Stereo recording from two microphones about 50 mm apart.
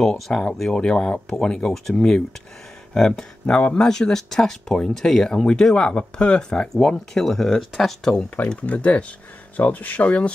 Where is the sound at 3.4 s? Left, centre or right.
Left.